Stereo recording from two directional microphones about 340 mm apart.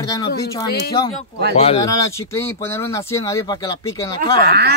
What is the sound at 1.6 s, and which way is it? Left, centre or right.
Speech, centre.